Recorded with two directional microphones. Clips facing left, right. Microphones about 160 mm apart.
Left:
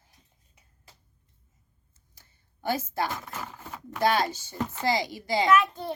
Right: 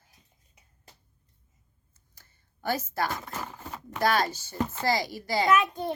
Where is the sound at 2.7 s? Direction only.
20° left (ahead or behind).